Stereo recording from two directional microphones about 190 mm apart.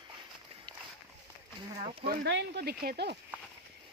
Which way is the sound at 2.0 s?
60° right (ahead or behind).